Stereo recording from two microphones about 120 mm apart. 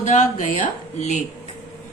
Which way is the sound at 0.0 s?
85° left.